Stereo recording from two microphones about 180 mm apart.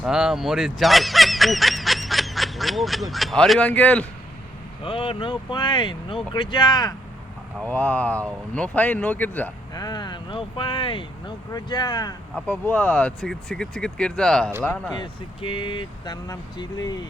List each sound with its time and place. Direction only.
0.0 s speech: 5° right (ahead or behind)
4.8 s speech: 30° left (ahead or behind)
7.6 s speech: 10° left (ahead or behind)
9.7 s speech: 20° left (ahead or behind)
12.5 s speech: 5° left (ahead or behind)
14.9 s speech: 30° left (ahead or behind)